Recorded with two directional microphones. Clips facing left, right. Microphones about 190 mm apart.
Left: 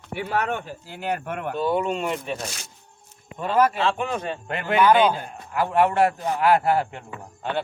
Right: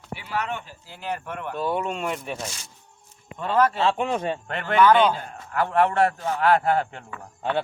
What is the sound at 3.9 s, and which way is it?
Speech, 25° right (ahead or behind).